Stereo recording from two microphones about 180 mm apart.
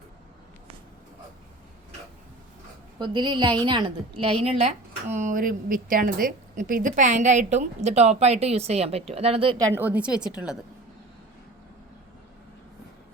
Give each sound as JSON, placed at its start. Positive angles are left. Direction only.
{"t": 3.0, "sound": "a woman's voice", "side_deg": -25}